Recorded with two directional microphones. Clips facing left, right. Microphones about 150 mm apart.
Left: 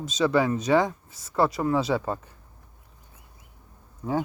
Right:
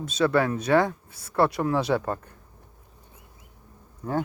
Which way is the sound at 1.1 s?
65° right (ahead or behind).